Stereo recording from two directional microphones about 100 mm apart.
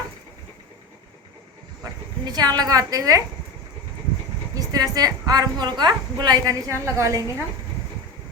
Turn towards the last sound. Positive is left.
turn(degrees=-35)  # may be behind; listen again after turning